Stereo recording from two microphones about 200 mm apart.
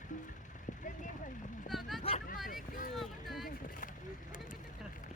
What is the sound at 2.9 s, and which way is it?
Speech, centre (ahead or behind).